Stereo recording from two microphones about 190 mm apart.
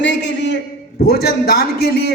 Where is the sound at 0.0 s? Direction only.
70° left (ahead or behind).